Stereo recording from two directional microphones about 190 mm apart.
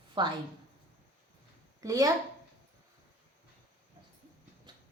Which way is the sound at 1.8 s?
20° right (ahead or behind).